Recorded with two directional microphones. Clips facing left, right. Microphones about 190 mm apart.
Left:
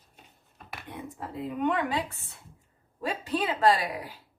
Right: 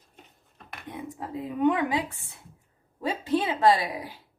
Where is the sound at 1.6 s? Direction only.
15° right (ahead or behind).